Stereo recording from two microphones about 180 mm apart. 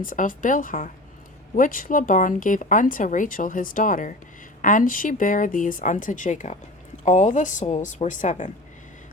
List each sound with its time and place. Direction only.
0.0 s speech: 50° left (ahead or behind)